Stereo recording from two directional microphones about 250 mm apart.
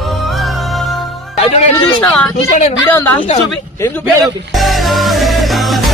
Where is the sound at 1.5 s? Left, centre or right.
Left.